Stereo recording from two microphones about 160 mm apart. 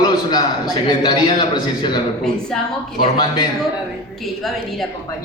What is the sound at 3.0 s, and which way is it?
Speech, 25° left (ahead or behind).